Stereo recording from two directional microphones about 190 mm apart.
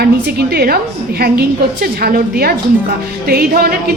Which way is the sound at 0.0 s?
55° right (ahead or behind).